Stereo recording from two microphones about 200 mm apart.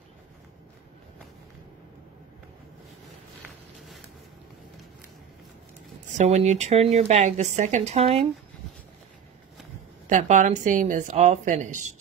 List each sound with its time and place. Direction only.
6.1 s speech: 35° right (ahead or behind)
10.0 s speech: 40° right (ahead or behind)